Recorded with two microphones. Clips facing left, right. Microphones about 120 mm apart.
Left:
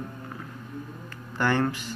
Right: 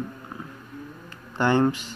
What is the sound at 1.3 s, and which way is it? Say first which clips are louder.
Speech: right 4 dB; 20° right (ahead or behind).